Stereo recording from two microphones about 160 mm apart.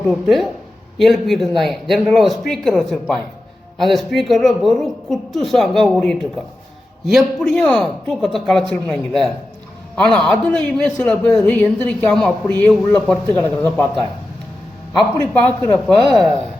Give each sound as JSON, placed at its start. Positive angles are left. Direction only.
{"t": 0.1, "sound": "a woman's voice", "side_deg": 0}
{"t": 15.2, "sound": "speech", "side_deg": 10}